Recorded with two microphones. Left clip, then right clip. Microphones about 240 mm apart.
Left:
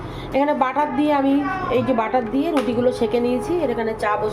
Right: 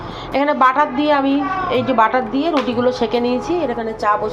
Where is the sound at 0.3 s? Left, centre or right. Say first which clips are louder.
Right 5 dB; centre.